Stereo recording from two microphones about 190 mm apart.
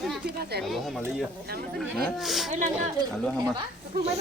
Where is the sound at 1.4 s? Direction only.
55° right (ahead or behind).